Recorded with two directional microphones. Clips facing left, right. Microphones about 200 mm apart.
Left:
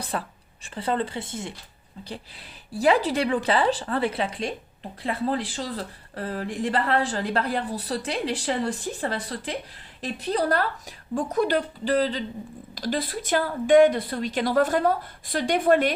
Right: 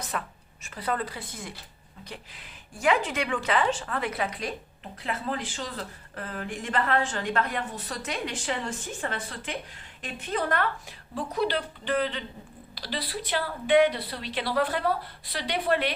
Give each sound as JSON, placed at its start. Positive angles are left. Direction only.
{"t": 0.0, "sound": "a woman's voice", "side_deg": 30}
{"t": 12.7, "sound": "speech", "side_deg": 45}